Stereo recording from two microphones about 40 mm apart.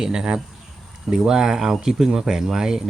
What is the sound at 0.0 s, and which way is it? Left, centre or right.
Speech, centre.